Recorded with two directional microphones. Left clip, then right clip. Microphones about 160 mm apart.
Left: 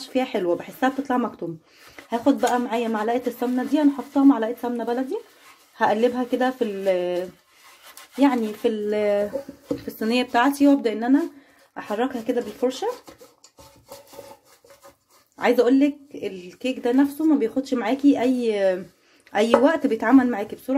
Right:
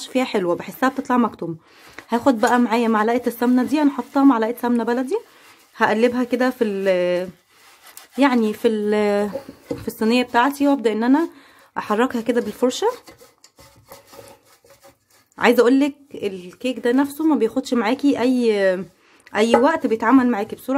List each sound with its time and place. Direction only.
0.0 s a woman's voice: 25° right (ahead or behind)
11.7 s a woman's voice: 35° right (ahead or behind)
15.3 s a woman's voice: 40° right (ahead or behind); by 20.5 s 20° right (ahead or behind)